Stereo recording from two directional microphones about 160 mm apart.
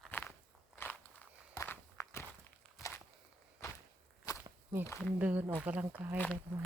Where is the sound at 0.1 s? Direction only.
10° left (ahead or behind).